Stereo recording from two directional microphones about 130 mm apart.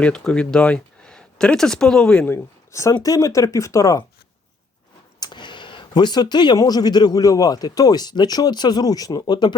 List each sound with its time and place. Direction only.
0.0 s speech: 5° left (ahead or behind)
2.3 s speech: 20° left (ahead or behind)
5.2 s speech: 35° left (ahead or behind)